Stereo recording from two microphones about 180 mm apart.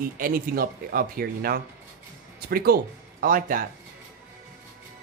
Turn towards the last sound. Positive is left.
turn(degrees=-50)  # may be behind; listen again after turning